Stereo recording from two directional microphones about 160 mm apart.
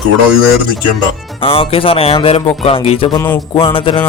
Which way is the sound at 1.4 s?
35° left (ahead or behind).